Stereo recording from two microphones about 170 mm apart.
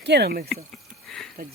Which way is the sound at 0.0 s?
80° right.